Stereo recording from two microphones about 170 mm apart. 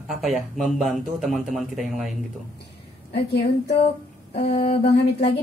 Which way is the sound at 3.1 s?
75° left (ahead or behind).